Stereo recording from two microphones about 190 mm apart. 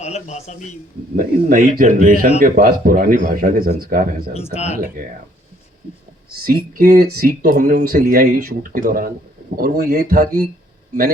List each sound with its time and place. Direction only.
0.0 s a man's voice: 35° left (ahead or behind)
1.1 s speech: 45° right (ahead or behind)
4.5 s a man's voice: 35° left (ahead or behind)
6.4 s speech: 50° right (ahead or behind)